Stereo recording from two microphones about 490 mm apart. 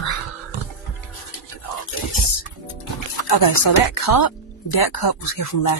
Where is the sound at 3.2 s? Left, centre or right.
Left.